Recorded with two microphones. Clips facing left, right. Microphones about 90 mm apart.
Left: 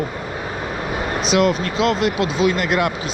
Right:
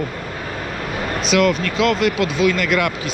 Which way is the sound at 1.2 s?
30° left (ahead or behind).